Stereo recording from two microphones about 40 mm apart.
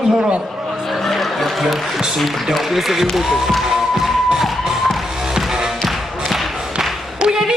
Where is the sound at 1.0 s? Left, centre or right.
Centre.